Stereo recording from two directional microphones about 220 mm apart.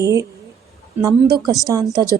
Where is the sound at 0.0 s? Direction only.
15° right (ahead or behind).